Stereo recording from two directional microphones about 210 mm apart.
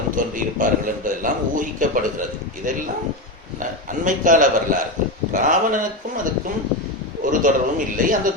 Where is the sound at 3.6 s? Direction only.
40° right (ahead or behind).